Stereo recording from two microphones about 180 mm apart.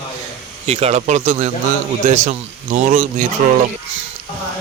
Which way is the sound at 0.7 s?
35° right (ahead or behind).